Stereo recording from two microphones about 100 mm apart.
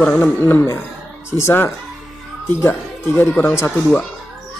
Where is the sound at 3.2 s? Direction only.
20° left (ahead or behind).